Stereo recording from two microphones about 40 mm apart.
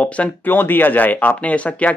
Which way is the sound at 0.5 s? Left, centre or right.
Left.